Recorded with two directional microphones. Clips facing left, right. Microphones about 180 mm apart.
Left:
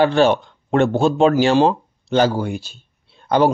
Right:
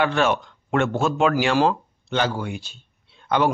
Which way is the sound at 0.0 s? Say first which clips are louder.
Left 6 dB; 30° left (ahead or behind).